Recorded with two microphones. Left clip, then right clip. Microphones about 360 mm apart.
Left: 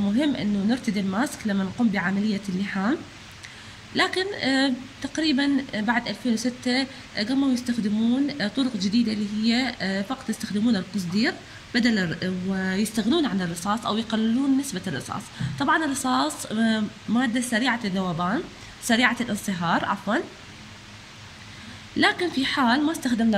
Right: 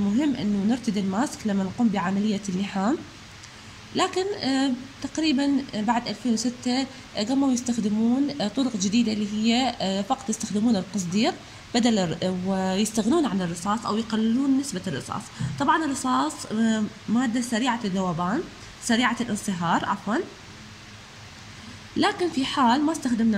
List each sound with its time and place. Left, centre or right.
0.2 s a woman's voice: centre
21.9 s speech: centre